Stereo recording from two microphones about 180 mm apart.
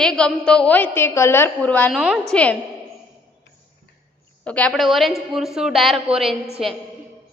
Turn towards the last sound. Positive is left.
turn(degrees=0)  # may be behind; listen again after turning